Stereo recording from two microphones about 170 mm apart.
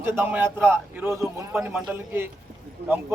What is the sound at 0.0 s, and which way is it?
A man's voice, 15° right (ahead or behind).